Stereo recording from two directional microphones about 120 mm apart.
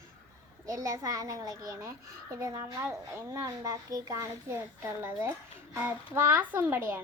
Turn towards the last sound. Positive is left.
turn(degrees=-20)  # may be behind; listen again after turning